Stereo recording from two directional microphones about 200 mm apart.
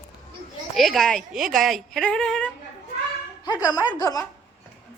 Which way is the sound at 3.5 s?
15° left (ahead or behind).